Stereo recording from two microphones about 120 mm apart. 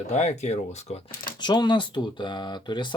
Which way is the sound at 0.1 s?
70° left (ahead or behind).